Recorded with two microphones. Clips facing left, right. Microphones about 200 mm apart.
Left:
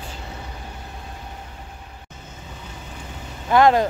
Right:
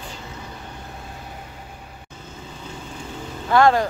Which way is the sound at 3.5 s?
20° left (ahead or behind).